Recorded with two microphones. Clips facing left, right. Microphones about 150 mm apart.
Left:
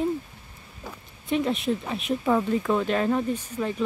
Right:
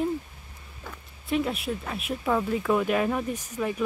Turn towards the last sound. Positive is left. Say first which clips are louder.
# left 2 dB
turn(degrees=-10)  # may be behind; listen again after turning